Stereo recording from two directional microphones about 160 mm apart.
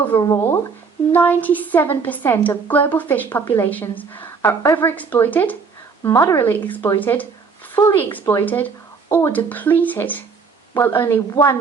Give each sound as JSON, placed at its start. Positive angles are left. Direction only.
{"t": 0.0, "sound": "a woman's voice", "side_deg": 15}